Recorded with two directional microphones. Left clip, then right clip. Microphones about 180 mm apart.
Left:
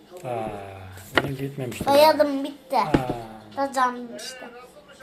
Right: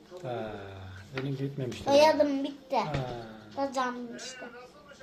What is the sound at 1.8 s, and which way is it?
A woman's voice, 10° right (ahead or behind).